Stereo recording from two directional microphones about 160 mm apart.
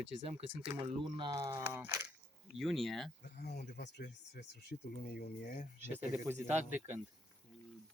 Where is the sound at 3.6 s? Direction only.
80° left.